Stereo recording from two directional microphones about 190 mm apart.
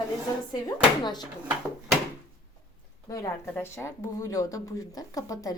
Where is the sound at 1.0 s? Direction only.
20° left (ahead or behind).